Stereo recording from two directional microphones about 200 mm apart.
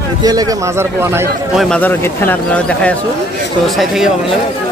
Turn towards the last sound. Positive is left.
turn(degrees=0)  # may be behind; listen again after turning